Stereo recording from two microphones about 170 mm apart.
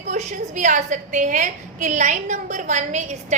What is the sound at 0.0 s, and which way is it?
A woman's voice, 45° right (ahead or behind).